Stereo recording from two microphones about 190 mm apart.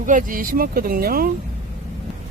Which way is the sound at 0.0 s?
45° right (ahead or behind).